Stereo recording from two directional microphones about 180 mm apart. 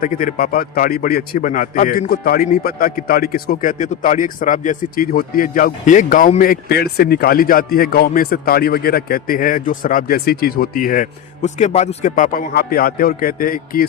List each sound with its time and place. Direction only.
0.0 s a man's voice: 50° left (ahead or behind)